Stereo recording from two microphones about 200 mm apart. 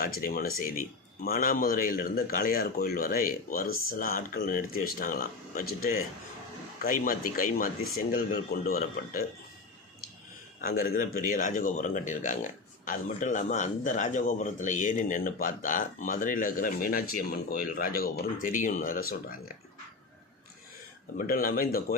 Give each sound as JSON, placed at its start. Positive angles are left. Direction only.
{"t": 0.0, "sound": "a man's voice", "side_deg": 45}
{"t": 10.6, "sound": "a man's voice", "side_deg": 45}
{"t": 21.2, "sound": "a man's voice", "side_deg": 45}